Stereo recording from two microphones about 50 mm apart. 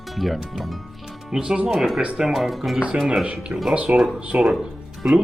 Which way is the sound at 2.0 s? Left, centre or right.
Right.